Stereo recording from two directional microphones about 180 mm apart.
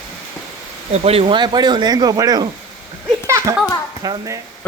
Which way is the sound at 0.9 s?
35° right (ahead or behind).